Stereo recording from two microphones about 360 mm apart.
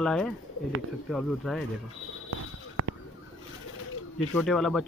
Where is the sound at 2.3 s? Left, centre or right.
Right.